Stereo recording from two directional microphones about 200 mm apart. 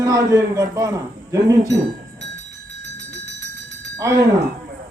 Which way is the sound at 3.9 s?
15° right (ahead or behind).